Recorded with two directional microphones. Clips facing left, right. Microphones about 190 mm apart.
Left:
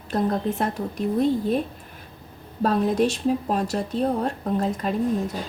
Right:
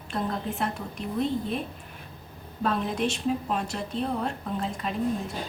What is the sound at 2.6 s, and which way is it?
A woman's voice, 40° left (ahead or behind).